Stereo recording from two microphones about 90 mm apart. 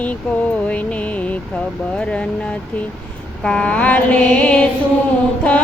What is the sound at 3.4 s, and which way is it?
Mantra, 10° left (ahead or behind).